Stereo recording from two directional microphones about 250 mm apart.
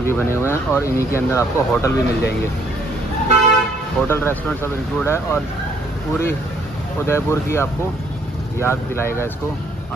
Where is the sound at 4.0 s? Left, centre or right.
Centre.